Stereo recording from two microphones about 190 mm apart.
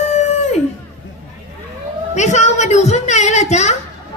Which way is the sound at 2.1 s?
35° left (ahead or behind).